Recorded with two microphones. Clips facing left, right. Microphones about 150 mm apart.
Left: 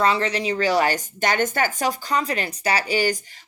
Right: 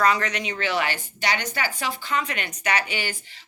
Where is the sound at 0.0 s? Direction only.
30° left (ahead or behind).